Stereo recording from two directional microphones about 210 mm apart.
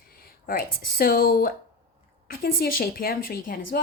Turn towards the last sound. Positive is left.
turn(degrees=45)  # may be behind; listen again after turning